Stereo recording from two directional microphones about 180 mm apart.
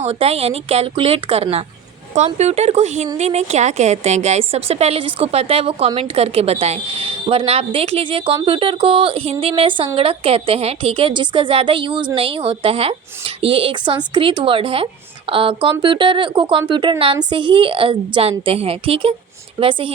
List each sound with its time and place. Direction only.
0.0 s a woman's voice: 35° right (ahead or behind)